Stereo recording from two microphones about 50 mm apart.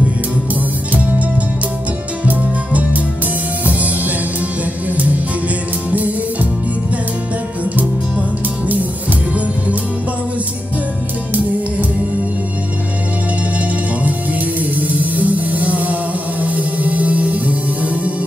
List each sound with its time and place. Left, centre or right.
2.2 s music: right
5.9 s music: right
14.6 s music: right